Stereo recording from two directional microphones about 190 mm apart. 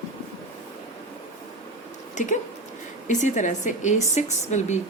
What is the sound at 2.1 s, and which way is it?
Speech, 40° left (ahead or behind).